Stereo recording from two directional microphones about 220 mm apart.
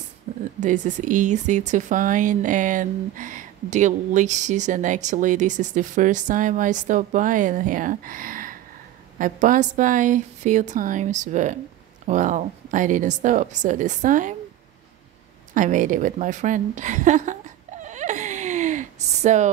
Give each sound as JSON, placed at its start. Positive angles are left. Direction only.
{"t": 0.6, "sound": "speech", "side_deg": -35}
{"t": 15.5, "sound": "speech", "side_deg": -35}
{"t": 17.8, "sound": "a sound", "side_deg": -35}